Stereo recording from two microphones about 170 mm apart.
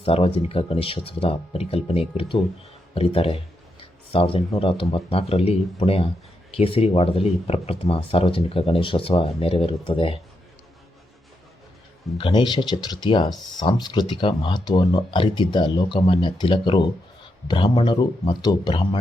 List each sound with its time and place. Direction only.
0.0 s speech: 35° left (ahead or behind)
12.1 s speech: 30° left (ahead or behind)